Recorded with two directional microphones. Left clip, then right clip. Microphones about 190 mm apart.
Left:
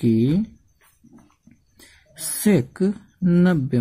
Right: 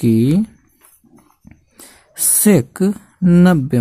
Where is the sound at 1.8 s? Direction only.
35° right (ahead or behind).